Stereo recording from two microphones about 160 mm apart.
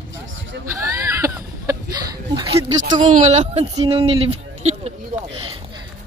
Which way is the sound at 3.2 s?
40° right (ahead or behind).